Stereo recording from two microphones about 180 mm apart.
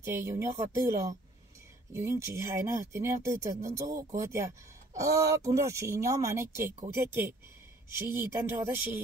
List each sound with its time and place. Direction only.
0.0 s speech: 15° right (ahead or behind)